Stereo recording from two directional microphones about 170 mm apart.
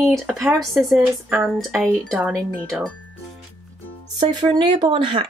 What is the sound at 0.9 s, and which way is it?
Speech, 10° right (ahead or behind).